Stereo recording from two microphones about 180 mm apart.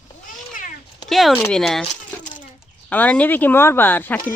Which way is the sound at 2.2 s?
45° left (ahead or behind).